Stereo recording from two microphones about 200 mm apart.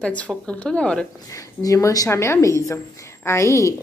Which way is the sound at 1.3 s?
15° left (ahead or behind).